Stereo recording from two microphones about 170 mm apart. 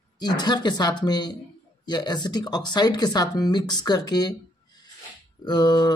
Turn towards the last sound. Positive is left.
turn(degrees=25)  # may be behind; listen again after turning